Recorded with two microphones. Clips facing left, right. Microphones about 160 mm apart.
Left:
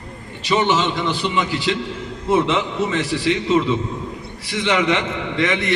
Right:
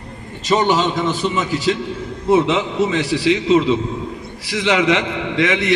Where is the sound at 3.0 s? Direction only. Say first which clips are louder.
Right 3 dB; 75° right (ahead or behind).